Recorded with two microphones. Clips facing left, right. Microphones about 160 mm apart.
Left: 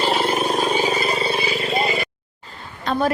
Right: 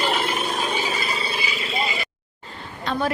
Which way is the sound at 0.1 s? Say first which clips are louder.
Left 5 dB; 35° left (ahead or behind).